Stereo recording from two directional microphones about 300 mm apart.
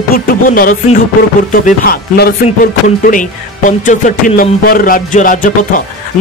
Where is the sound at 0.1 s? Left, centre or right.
Left.